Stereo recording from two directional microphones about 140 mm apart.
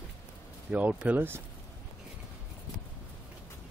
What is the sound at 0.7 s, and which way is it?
Speech, 10° right (ahead or behind).